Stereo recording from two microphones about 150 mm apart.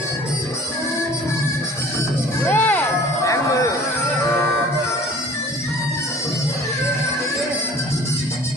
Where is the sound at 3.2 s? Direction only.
20° left (ahead or behind).